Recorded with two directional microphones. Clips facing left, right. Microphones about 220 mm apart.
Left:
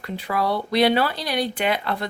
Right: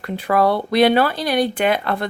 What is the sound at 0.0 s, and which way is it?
Speech, 55° right (ahead or behind).